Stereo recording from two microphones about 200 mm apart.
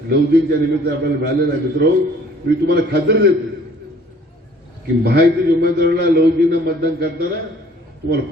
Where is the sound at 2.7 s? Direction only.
55° right (ahead or behind).